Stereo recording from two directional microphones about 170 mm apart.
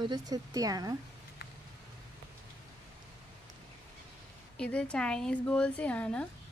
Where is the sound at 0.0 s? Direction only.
25° right (ahead or behind).